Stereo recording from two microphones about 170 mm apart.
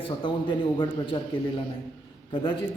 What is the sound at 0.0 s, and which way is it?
A man's voice, 30° left (ahead or behind).